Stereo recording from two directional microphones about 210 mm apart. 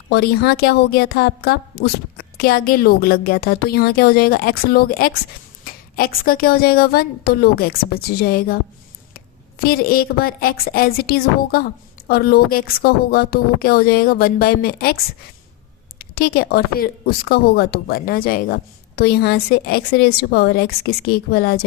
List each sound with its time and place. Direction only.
0.1 s a woman's voice: 50° left (ahead or behind)
9.6 s a woman's voice: 45° left (ahead or behind)
16.0 s a woman's voice: 45° left (ahead or behind)